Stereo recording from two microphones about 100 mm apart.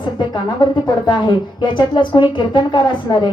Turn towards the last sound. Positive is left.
turn(degrees=50)  # may be behind; listen again after turning